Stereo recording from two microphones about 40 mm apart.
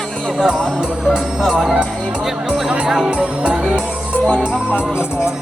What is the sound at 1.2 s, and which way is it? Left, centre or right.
Speech, centre.